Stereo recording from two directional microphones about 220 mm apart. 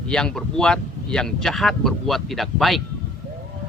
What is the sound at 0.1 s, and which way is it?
A man's voice, 5° left (ahead or behind).